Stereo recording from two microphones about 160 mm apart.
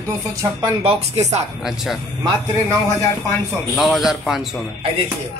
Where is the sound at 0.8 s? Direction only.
40° right (ahead or behind).